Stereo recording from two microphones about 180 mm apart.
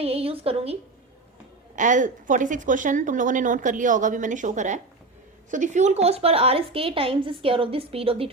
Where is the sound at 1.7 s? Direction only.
45° right (ahead or behind).